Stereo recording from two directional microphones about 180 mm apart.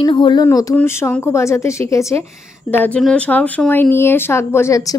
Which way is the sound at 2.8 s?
5° left (ahead or behind).